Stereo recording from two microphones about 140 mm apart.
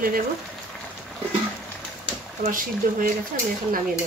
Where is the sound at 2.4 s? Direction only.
75° right (ahead or behind).